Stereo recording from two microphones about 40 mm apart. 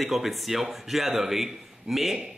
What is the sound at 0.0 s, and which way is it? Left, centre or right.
Speech, centre.